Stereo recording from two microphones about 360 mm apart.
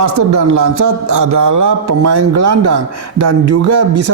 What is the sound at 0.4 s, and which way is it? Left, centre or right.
Speech, right.